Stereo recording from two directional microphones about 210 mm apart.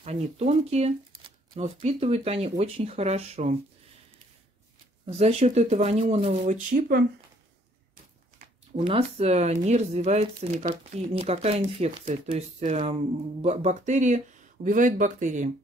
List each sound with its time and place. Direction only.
0.0 s speech: 30° right (ahead or behind)
5.0 s speech: 30° right (ahead or behind)
8.7 s speech: 25° right (ahead or behind)